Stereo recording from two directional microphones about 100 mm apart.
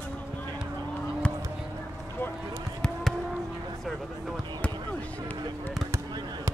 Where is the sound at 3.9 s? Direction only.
Centre (ahead or behind).